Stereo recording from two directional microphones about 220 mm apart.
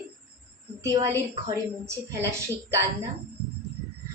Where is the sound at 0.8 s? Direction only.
15° right (ahead or behind).